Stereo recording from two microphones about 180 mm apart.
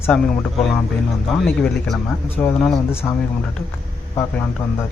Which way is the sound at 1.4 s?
5° left (ahead or behind).